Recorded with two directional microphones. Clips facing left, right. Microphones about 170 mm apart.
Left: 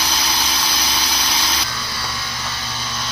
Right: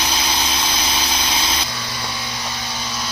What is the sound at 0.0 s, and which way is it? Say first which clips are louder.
Engine: right 1 dB; 25° right (ahead or behind).